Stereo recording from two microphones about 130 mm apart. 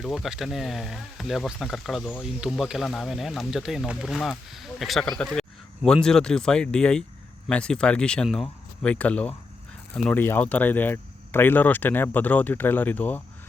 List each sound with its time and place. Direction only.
0.0 s speech: centre (ahead or behind); by 13.2 s 15° left (ahead or behind)